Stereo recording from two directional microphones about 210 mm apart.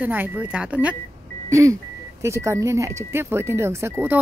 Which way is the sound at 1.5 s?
15° right (ahead or behind).